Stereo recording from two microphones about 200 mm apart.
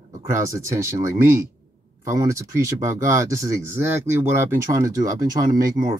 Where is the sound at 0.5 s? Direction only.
15° right (ahead or behind).